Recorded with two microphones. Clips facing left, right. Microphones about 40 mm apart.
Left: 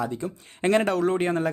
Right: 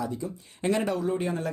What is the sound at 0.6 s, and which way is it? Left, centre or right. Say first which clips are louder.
Speech: left 5 dB; left.